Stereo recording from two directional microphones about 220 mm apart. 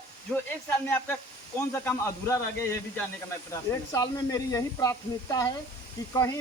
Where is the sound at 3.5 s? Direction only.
15° left (ahead or behind).